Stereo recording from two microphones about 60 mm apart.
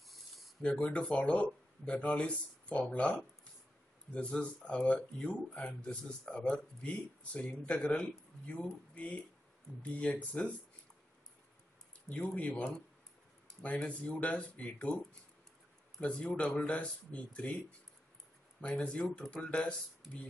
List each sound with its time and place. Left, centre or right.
0.6 s speech: left
10.4 s speech: left
12.1 s speech: left
16.0 s speech: centre